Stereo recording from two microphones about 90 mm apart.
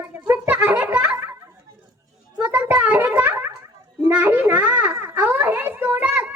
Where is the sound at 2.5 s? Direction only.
15° right (ahead or behind).